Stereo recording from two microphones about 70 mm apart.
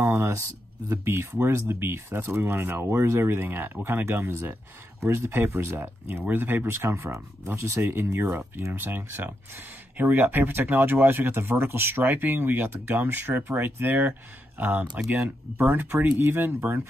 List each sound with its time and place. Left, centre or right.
0.0 s speech: right
15.6 s speech: right